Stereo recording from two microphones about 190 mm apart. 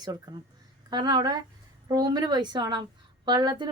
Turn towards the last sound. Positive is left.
turn(degrees=-20)  # may be behind; listen again after turning